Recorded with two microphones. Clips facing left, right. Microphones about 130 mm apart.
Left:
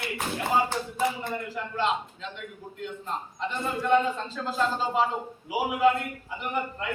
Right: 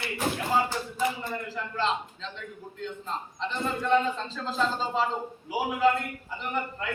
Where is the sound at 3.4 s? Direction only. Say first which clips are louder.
Left 1 dB; 5° left (ahead or behind).